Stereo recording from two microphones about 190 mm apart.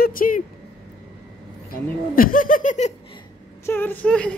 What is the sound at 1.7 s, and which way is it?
Speech, 50° left (ahead or behind).